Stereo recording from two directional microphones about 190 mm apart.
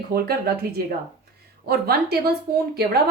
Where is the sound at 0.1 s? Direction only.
55° right (ahead or behind).